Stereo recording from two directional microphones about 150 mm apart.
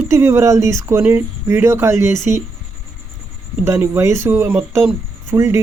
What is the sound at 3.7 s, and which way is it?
Speech, 15° right (ahead or behind).